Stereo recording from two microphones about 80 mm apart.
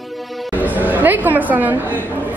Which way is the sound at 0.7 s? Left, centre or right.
Right.